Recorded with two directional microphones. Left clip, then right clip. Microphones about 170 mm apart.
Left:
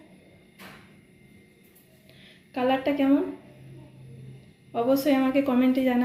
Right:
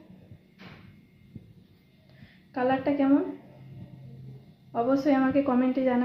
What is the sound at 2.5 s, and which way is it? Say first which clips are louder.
Speech: left 1 dB; 25° left (ahead or behind).